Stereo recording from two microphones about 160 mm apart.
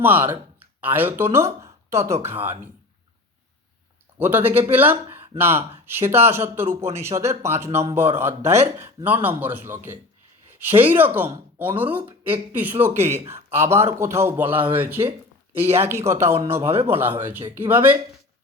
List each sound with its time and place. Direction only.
0.0 s speech: 10° right (ahead or behind)
1.6 s a sound: 20° right (ahead or behind)
2.2 s speech: 15° right (ahead or behind)
4.2 s a man's voice: 10° right (ahead or behind)